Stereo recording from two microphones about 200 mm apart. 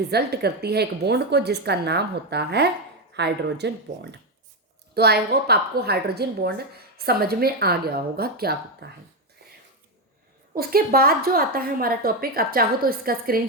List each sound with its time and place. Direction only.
0.1 s a woman's voice: 55° right (ahead or behind)
4.9 s a woman's voice: 55° right (ahead or behind)
9.4 s a sound: 50° right (ahead or behind)
10.5 s a woman's voice: 50° right (ahead or behind)